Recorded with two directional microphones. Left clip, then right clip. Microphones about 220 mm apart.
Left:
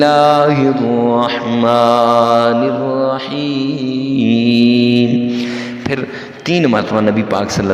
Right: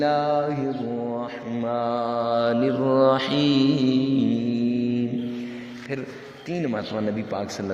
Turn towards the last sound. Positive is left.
turn(degrees=40)  # may be behind; listen again after turning